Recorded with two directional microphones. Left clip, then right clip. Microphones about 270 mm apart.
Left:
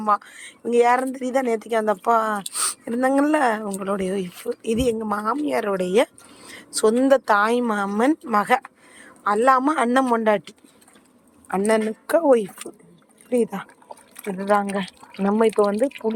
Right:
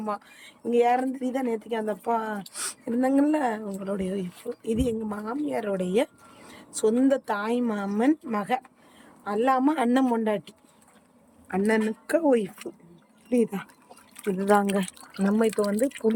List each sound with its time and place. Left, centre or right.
0.0 s speech: centre
15.1 s speech: centre